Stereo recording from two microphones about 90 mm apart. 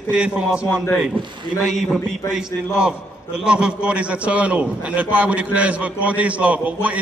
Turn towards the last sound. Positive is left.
turn(degrees=-15)  # may be behind; listen again after turning